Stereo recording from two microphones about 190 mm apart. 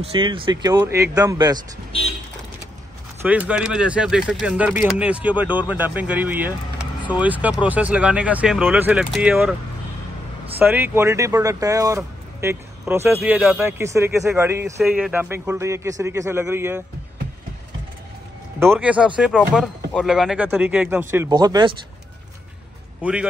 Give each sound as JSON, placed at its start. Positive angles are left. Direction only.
{"t": 0.0, "sound": "speech", "side_deg": -25}
{"t": 3.2, "sound": "speech", "side_deg": -5}
{"t": 10.6, "sound": "speech", "side_deg": -10}
{"t": 18.6, "sound": "speech", "side_deg": -10}
{"t": 21.3, "sound": "speech", "side_deg": -20}
{"t": 23.0, "sound": "speech", "side_deg": -5}